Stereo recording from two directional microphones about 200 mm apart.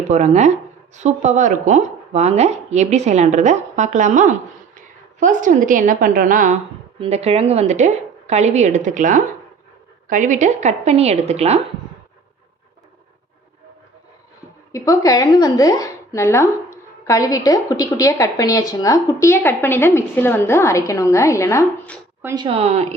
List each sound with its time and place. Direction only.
0.1 s speech: 35° right (ahead or behind)
14.7 s a woman's voice: 15° left (ahead or behind)
22.2 s speech: 15° right (ahead or behind)
22.4 s speech: 30° right (ahead or behind)